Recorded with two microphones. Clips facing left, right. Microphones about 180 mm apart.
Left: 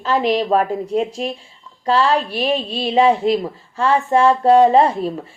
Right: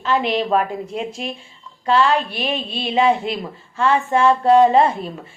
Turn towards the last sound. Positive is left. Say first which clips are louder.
# left 2 dB
turn(degrees=35)  # may be behind; listen again after turning